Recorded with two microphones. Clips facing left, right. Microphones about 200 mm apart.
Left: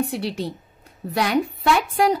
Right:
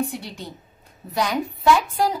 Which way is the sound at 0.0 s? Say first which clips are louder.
Left 4 dB; 70° left (ahead or behind).